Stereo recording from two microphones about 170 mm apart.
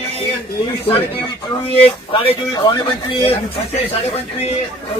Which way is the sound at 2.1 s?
30° left (ahead or behind).